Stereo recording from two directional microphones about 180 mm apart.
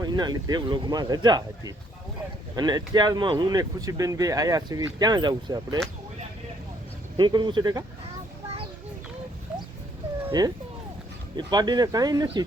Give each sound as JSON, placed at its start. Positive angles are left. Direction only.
{"t": 0.0, "sound": "speech", "side_deg": -20}
{"t": 7.2, "sound": "speech", "side_deg": -25}
{"t": 11.3, "sound": "speech", "side_deg": -25}